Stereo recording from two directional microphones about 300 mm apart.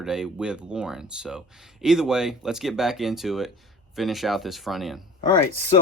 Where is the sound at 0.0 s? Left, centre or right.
Centre.